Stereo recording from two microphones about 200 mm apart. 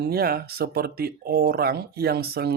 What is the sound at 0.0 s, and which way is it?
Speech, 50° right (ahead or behind).